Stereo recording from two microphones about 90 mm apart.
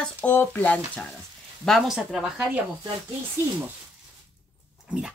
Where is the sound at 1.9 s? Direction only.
5° right (ahead or behind).